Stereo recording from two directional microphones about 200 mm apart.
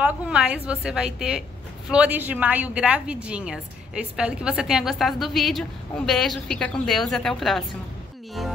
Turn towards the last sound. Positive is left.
turn(degrees=0)  # may be behind; listen again after turning